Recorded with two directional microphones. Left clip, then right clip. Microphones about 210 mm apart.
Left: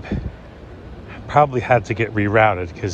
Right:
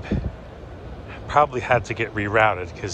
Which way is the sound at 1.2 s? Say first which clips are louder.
Left 3 dB; 10° right (ahead or behind).